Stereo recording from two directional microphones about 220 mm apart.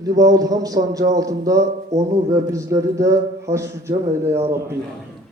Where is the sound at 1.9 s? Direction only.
30° right (ahead or behind).